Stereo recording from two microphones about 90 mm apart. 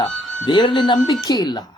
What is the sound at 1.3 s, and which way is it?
Speech, 45° left (ahead or behind).